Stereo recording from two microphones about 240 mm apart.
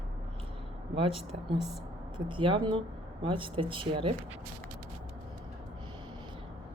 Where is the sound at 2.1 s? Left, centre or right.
Centre.